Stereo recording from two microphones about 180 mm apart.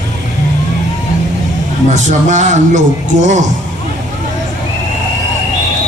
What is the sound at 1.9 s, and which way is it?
A man's voice, 40° right (ahead or behind).